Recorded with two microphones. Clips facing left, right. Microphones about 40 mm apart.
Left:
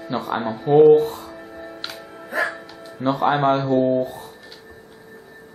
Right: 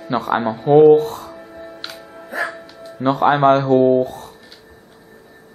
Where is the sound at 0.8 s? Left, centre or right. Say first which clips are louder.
Right 1 dB; centre.